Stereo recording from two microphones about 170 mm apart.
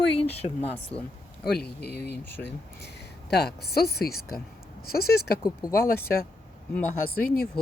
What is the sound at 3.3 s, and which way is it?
Speech, 70° left (ahead or behind).